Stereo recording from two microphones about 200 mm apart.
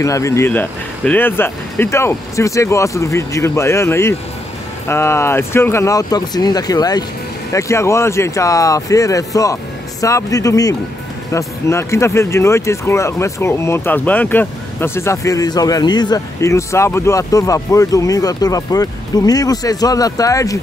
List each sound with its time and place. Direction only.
0.0 s speech: 15° left (ahead or behind)